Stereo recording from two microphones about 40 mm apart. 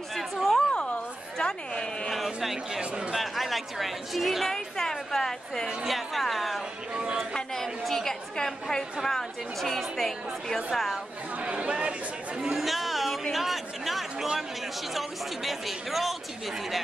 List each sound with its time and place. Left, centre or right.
0.1 s a sound: centre
0.6 s a sound: left
1.4 s chatter: left
2.0 s a sound: centre
2.8 s speech: right
3.2 s a woman's voice: centre
4.5 s a woman's voice: centre
7.5 s a sound: centre
9.0 s a woman's voice: centre
11.3 s speech: right
12.4 s chatter: centre
15.0 s a woman's voice: centre